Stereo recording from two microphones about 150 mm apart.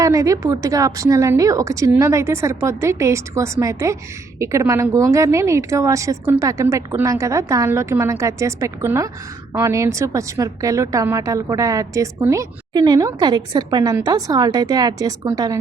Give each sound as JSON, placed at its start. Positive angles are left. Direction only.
{"t": 0.0, "sound": "a woman's voice", "side_deg": -20}